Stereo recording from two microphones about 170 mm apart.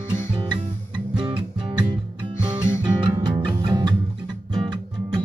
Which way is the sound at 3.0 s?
25° right (ahead or behind).